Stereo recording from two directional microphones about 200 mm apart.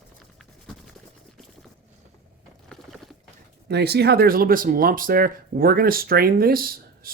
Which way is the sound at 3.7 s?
55° right (ahead or behind).